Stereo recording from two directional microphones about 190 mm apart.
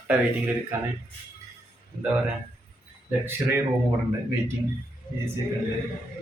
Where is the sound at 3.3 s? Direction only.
10° right (ahead or behind).